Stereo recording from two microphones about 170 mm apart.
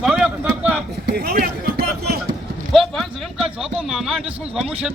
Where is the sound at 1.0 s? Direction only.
65° right (ahead or behind).